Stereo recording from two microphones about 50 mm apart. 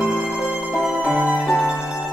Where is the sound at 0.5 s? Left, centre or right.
Right.